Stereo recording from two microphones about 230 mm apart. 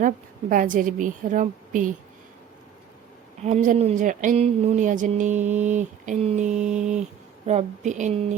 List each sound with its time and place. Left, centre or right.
0.0 s speech: right
3.4 s speech: right